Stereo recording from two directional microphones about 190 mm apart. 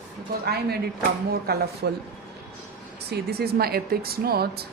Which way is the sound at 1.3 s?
55° right (ahead or behind).